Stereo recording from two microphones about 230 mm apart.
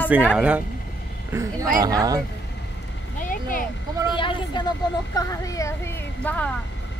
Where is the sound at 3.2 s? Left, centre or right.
Left.